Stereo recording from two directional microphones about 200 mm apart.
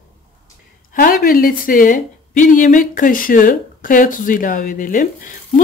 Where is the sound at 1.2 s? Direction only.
45° left (ahead or behind).